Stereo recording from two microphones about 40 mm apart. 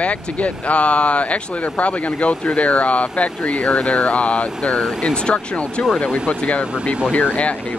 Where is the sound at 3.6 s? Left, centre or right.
Left.